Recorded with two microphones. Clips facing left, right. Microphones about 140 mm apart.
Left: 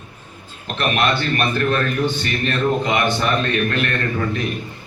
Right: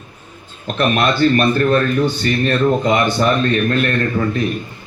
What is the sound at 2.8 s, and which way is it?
Speech, 40° right (ahead or behind).